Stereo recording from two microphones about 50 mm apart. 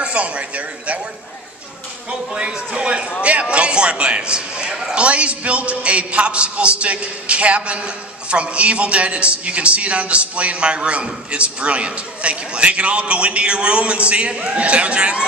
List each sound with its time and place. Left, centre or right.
0.0 s a man's voice: right
2.0 s a man's voice: centre
4.9 s a man's voice: right